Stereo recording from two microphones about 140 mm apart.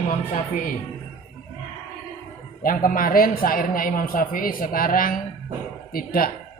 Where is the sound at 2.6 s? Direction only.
80° left.